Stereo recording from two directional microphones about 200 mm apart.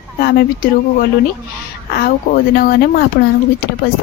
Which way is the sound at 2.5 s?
50° left (ahead or behind).